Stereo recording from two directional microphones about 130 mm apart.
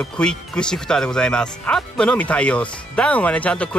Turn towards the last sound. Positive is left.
turn(degrees=10)  # may be behind; listen again after turning